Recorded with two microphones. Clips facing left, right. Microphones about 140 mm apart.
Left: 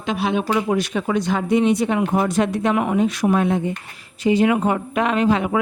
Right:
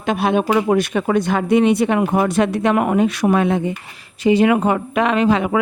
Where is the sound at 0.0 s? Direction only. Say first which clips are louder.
Right 4 dB; 55° right (ahead or behind).